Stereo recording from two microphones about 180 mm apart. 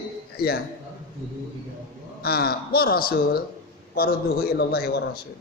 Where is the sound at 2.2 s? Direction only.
60° left (ahead or behind).